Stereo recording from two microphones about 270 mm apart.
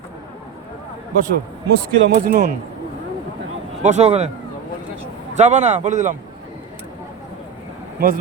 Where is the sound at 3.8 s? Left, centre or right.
Right.